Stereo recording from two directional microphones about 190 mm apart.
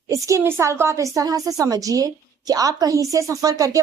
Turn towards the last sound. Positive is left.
turn(degrees=-20)  # may be behind; listen again after turning